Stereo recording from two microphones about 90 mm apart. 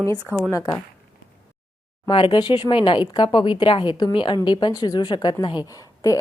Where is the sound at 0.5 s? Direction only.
40° left (ahead or behind).